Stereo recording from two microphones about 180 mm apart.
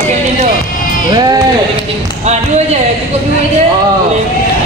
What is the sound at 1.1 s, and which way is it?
Music, 20° right (ahead or behind).